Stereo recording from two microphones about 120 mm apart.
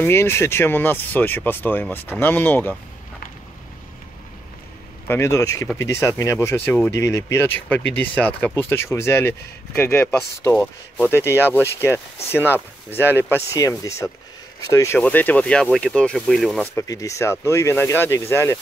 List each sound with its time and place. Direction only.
0.0 s speech: 20° left (ahead or behind)
5.0 s speech: 20° left (ahead or behind)
7.0 s speech: 25° left (ahead or behind)
15.0 s speech: 15° left (ahead or behind)
16.7 s speech: 30° left (ahead or behind)